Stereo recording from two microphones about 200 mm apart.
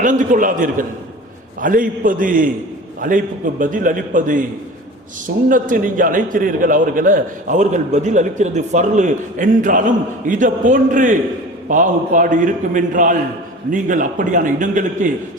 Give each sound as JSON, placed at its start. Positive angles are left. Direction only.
{"t": 0.0, "sound": "a man's voice", "side_deg": -40}
{"t": 5.5, "sound": "a man's voice", "side_deg": -40}